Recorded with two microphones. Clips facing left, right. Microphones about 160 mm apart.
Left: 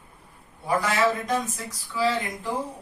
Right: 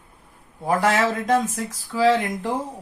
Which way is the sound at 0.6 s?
90° right.